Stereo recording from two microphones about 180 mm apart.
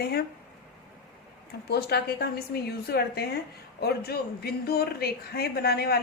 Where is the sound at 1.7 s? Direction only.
60° left (ahead or behind).